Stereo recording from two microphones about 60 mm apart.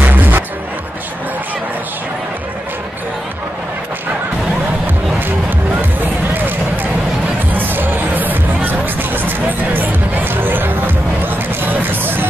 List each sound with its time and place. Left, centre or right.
0.0 s music: right
6.3 s a sound: right
7.5 s music: right